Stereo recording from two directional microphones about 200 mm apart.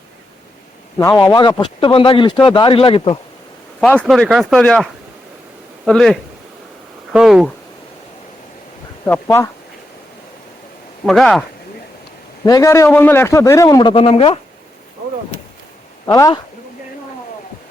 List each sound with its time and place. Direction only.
0.9 s speech: 15° left (ahead or behind)
3.8 s speech: 5° left (ahead or behind)
9.0 s a man's voice: 10° left (ahead or behind)
11.0 s speech: centre (ahead or behind)
12.5 s a man's voice: 15° left (ahead or behind)
16.0 s speech: 20° left (ahead or behind)